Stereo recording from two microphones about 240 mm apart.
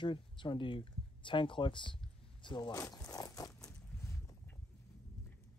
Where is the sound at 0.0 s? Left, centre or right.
Centre.